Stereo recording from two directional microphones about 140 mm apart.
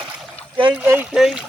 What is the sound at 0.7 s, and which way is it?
Speech, 15° right (ahead or behind).